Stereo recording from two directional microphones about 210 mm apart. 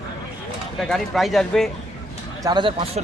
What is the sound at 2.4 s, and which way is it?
Speech, 20° right (ahead or behind).